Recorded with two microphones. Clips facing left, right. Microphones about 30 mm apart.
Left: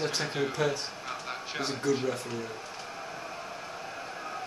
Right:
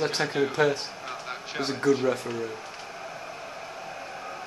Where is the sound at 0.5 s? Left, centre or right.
Right.